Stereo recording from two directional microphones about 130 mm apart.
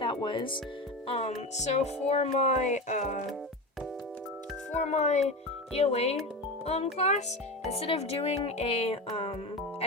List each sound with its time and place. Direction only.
0.0 s speech: 40° left (ahead or behind)
1.0 s speech: 50° left (ahead or behind)
4.7 s speech: 60° left (ahead or behind)